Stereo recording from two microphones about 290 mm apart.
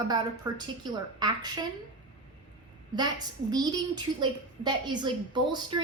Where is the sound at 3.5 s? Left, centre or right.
Centre.